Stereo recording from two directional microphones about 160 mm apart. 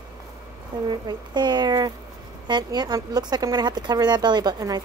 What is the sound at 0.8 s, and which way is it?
Speech, 25° right (ahead or behind).